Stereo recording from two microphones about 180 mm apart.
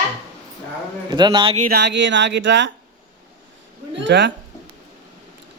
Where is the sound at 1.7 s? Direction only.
75° right (ahead or behind); by 2.7 s 90° right.